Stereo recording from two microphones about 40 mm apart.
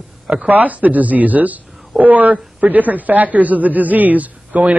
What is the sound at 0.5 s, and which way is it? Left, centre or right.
A man's voice, right.